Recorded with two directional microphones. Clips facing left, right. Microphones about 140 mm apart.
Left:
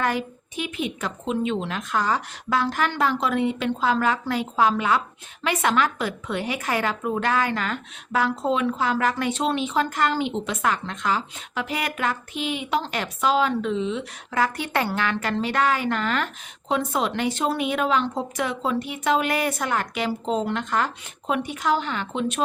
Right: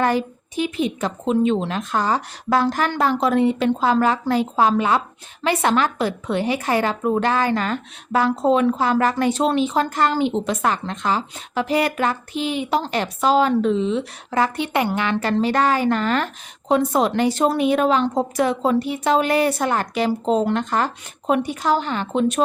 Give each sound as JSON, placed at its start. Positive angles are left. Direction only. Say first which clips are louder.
{"t": 0.0, "sound": "a woman's voice", "louder": "right 5 dB", "side_deg": -30}
{"t": 15.2, "sound": "a woman's voice", "louder": "right 6 dB", "side_deg": -35}